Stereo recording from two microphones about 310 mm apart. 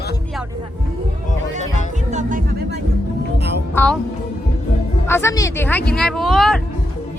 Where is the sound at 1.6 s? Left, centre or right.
Left.